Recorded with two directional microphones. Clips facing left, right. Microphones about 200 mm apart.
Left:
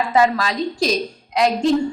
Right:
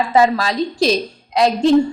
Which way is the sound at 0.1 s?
30° right (ahead or behind).